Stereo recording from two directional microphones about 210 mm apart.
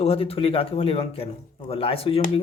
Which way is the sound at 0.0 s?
30° left (ahead or behind).